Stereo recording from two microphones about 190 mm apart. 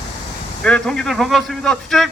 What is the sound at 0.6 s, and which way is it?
A man's voice, 5° left (ahead or behind).